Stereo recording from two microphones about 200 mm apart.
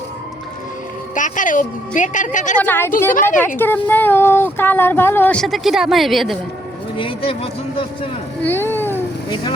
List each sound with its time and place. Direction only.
1.1 s a woman's voice: 40° left (ahead or behind)
2.6 s speech: 10° left (ahead or behind)
6.9 s speech: 25° left (ahead or behind)
8.4 s speech: 10° left (ahead or behind)